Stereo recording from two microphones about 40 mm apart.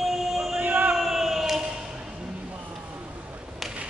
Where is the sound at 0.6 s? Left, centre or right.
Right.